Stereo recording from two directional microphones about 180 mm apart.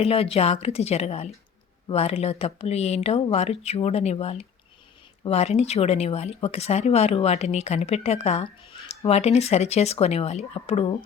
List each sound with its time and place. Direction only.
0.0 s speech: 35° left (ahead or behind)